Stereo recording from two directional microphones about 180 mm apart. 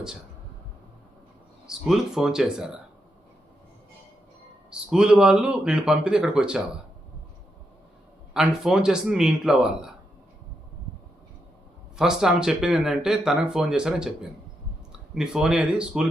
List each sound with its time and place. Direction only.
1.6 s speech: 5° right (ahead or behind)
4.7 s speech: 5° right (ahead or behind)
8.3 s speech: 5° right (ahead or behind)
11.9 s speech: 5° right (ahead or behind)